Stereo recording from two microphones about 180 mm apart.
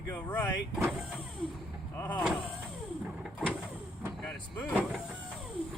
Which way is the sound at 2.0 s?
10° left (ahead or behind).